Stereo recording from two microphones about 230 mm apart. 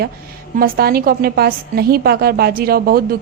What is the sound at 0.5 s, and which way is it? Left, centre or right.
A woman's voice, right.